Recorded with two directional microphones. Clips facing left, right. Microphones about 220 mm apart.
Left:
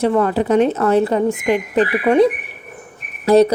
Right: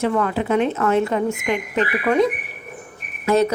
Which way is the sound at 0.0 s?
35° left (ahead or behind).